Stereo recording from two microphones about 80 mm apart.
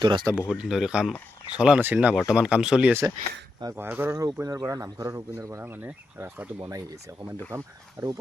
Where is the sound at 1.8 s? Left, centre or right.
Right.